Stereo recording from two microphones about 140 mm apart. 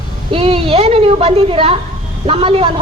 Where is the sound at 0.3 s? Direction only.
40° right (ahead or behind).